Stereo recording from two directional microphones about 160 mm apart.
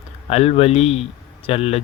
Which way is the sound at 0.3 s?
40° left (ahead or behind).